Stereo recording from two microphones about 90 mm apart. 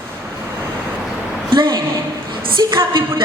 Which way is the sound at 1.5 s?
60° right (ahead or behind).